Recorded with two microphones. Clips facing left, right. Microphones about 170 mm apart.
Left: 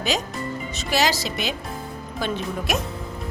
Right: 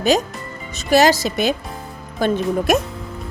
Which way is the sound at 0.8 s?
50° right (ahead or behind).